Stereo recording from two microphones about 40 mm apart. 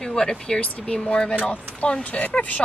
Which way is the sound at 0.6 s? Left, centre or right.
Left.